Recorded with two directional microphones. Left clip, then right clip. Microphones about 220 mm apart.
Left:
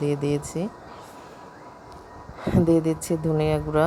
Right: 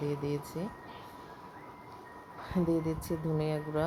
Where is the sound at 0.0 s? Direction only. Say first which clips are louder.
Left 10 dB; 30° left (ahead or behind).